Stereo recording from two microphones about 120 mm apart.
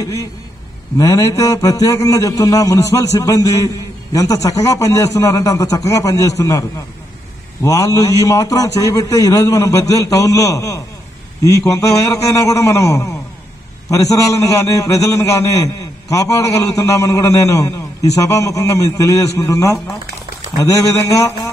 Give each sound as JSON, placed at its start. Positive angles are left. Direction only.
{"t": 0.0, "sound": "a man's voice", "side_deg": 30}
{"t": 7.6, "sound": "a man's voice", "side_deg": 30}